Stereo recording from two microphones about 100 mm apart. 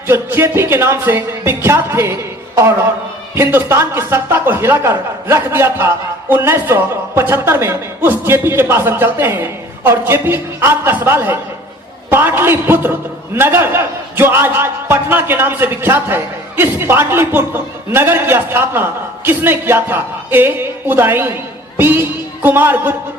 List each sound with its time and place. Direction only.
0.1 s a man's voice: 25° right (ahead or behind)